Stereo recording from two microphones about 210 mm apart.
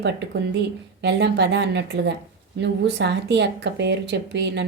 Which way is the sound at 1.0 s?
55° right (ahead or behind).